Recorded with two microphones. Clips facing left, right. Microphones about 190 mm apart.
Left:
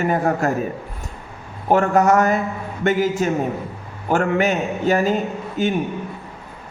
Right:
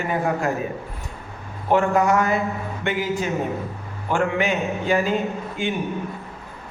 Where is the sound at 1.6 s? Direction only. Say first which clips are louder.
Left 3 dB; 45° left (ahead or behind).